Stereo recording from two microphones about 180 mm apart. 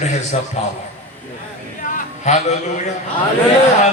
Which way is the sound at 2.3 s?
40° left (ahead or behind).